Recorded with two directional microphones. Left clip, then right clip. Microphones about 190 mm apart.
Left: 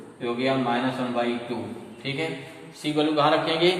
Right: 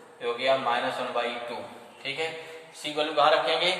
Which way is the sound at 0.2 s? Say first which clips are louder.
Even; centre (ahead or behind).